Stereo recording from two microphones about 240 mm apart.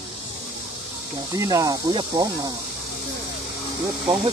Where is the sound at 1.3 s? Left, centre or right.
Centre.